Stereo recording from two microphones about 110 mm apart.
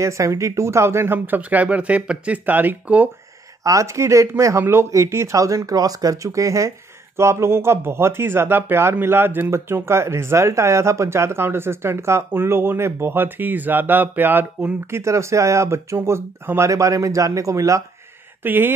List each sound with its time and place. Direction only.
0.0 s speech: 30° right (ahead or behind)
3.6 s speech: 30° right (ahead or behind)
18.4 s speech: 20° right (ahead or behind)